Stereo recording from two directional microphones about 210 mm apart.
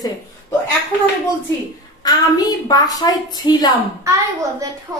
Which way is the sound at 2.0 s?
20° left (ahead or behind).